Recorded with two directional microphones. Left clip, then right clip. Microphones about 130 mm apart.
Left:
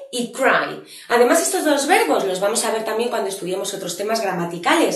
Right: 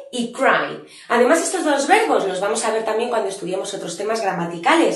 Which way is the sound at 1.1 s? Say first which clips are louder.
Even; 30° left (ahead or behind).